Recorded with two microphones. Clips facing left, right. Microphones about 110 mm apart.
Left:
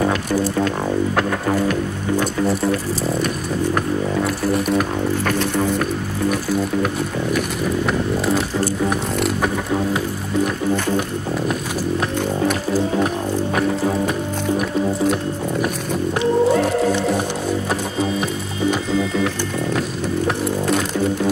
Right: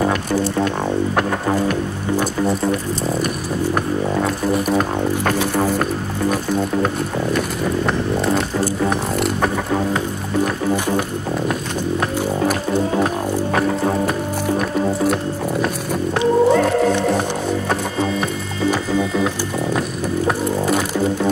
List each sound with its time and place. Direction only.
1.1 s music: 15° right (ahead or behind)
4.5 s speech: centre (ahead or behind)
13.6 s music: 35° right (ahead or behind)
16.2 s music: 20° right (ahead or behind)
19.1 s music: 20° right (ahead or behind)